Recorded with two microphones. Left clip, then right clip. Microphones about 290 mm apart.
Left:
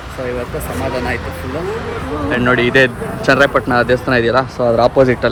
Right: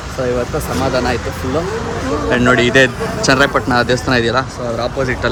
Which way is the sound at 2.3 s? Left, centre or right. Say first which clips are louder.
Right 1 dB; centre.